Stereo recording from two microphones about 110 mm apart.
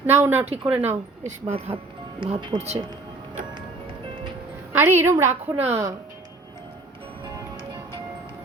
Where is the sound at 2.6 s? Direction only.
75° right (ahead or behind).